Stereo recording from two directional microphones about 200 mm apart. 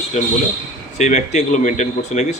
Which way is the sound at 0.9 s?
35° left (ahead or behind).